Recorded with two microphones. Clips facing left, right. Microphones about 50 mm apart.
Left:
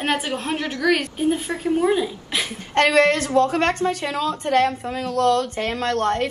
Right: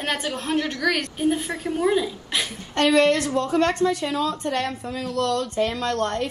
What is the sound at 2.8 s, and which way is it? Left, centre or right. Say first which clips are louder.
A woman's voice: left 2 dB; left.